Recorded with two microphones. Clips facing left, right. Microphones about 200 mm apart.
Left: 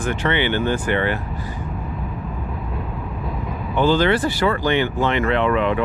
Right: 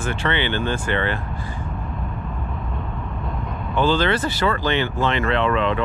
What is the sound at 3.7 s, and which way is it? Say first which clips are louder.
Speech: left 2 dB; 15° left (ahead or behind).